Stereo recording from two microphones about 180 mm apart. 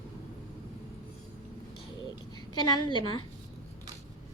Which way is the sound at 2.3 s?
25° left (ahead or behind).